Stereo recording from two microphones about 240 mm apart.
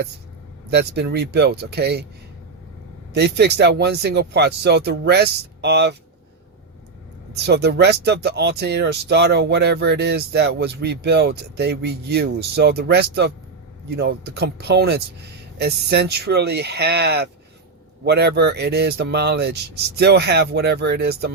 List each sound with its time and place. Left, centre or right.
0.7 s speech: right
3.1 s speech: right
7.3 s speech: right